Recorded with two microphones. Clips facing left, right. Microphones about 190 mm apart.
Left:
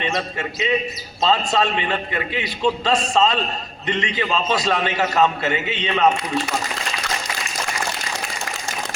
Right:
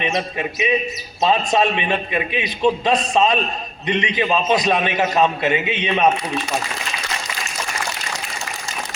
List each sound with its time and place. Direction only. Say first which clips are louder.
0.0 s a man's voice: right 2 dB; 20° right (ahead or behind)